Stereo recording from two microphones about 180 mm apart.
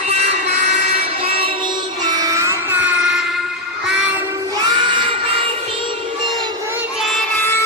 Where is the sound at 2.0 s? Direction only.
20° right (ahead or behind).